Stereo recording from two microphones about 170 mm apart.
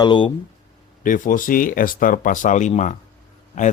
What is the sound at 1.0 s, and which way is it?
Speech, 50° left (ahead or behind).